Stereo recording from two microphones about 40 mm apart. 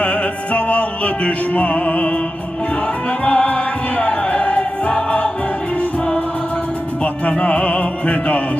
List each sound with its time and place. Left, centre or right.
0.0 s music: left
3.2 s music: left
7.0 s music: left